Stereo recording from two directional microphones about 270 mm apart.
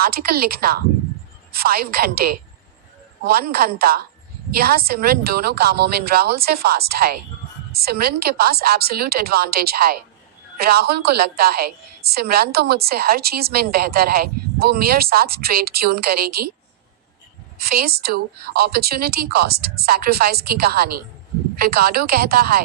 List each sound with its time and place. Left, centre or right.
0.0 s a woman's voice: right
17.6 s a woman's voice: right